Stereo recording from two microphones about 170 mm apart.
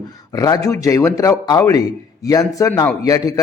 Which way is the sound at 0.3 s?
20° left (ahead or behind).